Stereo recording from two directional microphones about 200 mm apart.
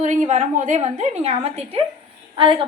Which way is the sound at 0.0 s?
40° right (ahead or behind).